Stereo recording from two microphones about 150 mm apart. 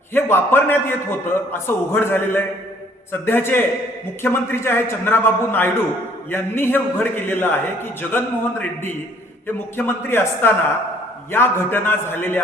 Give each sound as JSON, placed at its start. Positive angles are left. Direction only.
{"t": 0.1, "sound": "a man's voice", "side_deg": 15}